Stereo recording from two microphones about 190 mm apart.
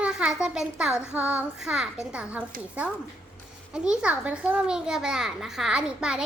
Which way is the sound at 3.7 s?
5° right (ahead or behind).